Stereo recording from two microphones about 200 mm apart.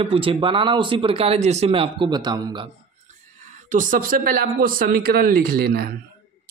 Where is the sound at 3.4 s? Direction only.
40° right (ahead or behind).